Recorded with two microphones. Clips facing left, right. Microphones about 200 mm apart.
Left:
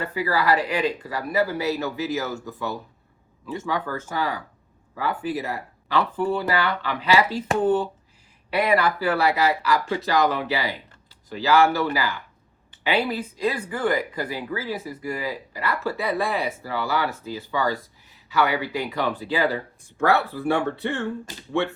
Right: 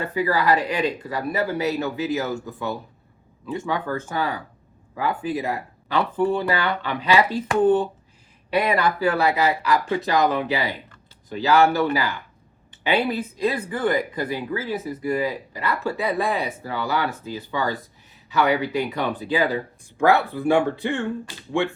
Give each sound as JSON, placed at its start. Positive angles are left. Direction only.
{"t": 0.0, "sound": "speech", "side_deg": -20}
{"t": 3.8, "sound": "speech", "side_deg": -20}